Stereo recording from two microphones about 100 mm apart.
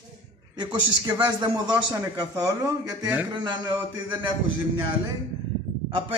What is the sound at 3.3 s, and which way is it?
Speech, 45° right (ahead or behind).